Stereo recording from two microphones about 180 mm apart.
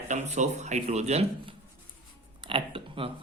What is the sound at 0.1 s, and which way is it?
Speech, 40° right (ahead or behind).